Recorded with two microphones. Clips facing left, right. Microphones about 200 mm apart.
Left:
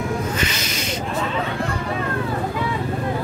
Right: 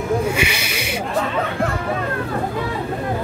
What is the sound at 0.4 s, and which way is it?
Snake, 10° right (ahead or behind).